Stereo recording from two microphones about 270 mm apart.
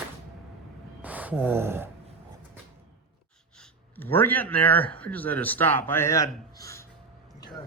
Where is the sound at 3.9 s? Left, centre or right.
Centre.